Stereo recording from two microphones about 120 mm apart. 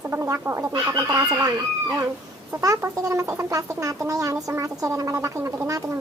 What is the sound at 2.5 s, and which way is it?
Speech, 25° right (ahead or behind).